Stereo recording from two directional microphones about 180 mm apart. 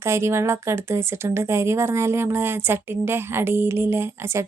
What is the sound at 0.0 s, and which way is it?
Speech, 15° right (ahead or behind).